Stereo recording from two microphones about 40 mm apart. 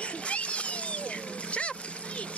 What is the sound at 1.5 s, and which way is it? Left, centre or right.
Vehicle, left.